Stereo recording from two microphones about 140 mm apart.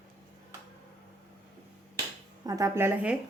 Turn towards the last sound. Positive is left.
turn(degrees=-15)  # may be behind; listen again after turning